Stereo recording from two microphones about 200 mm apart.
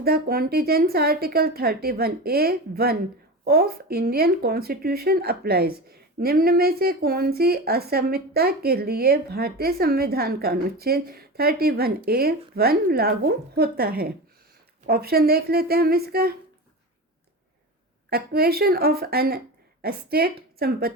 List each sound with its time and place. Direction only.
0.0 s speech: 50° right (ahead or behind)
18.1 s speech: 50° right (ahead or behind)